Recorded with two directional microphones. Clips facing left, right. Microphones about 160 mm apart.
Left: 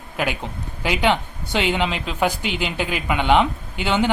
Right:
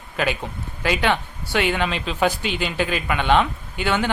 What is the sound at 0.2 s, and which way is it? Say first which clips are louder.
Speech: right 1 dB; 15° left (ahead or behind).